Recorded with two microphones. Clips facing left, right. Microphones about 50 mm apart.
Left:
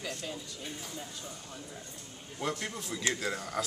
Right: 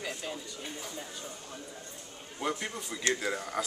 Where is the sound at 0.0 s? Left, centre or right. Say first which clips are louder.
Right 1 dB; centre.